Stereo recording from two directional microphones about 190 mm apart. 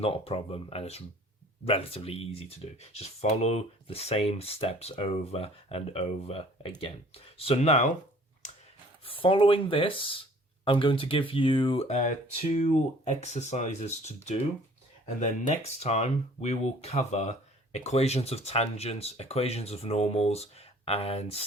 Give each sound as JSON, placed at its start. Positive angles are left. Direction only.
{"t": 0.0, "sound": "speech", "side_deg": 30}
{"t": 9.0, "sound": "speech", "side_deg": 30}